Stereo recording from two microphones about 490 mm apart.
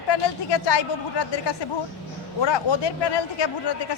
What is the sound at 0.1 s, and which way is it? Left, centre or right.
Speech, left.